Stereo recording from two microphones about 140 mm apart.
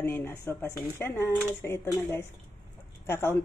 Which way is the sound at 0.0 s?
15° left (ahead or behind).